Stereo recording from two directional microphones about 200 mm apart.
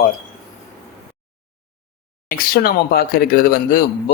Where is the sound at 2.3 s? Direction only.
50° left (ahead or behind).